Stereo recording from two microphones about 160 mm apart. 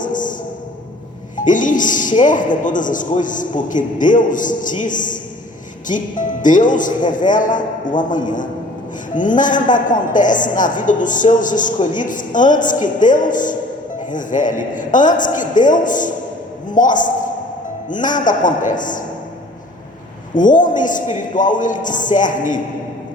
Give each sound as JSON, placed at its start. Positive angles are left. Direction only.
{"t": 0.0, "sound": "speech", "side_deg": 55}
{"t": 1.5, "sound": "a woman's voice", "side_deg": 55}
{"t": 20.4, "sound": "a woman's voice", "side_deg": 55}